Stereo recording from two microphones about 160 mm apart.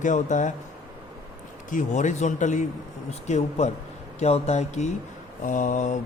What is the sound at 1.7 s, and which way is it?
Speech, 50° left (ahead or behind).